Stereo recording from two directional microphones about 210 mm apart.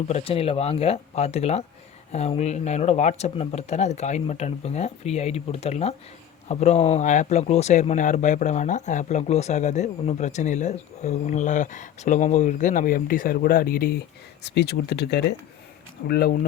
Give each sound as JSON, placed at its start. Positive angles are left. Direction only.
{"t": 0.1, "sound": "speech", "side_deg": 25}